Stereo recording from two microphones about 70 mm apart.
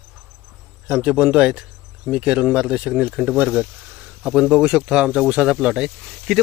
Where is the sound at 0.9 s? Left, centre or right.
Centre.